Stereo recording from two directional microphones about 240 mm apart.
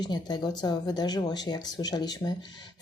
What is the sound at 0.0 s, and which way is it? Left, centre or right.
A woman's voice, centre.